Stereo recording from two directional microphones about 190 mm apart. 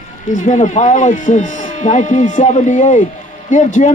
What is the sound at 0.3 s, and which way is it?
Speech, 40° left (ahead or behind).